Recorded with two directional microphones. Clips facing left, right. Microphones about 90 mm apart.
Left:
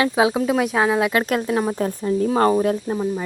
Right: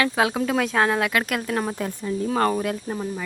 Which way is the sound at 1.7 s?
35° left (ahead or behind).